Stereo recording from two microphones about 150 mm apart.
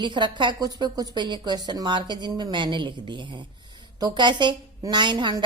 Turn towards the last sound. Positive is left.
turn(degrees=-30)  # may be behind; listen again after turning